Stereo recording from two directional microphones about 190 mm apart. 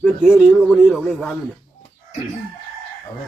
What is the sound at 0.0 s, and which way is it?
Speech, centre (ahead or behind).